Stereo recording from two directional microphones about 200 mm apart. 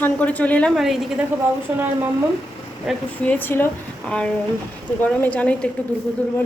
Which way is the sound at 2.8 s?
5° left (ahead or behind).